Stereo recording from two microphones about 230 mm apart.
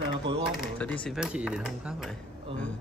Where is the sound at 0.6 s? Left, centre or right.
Centre.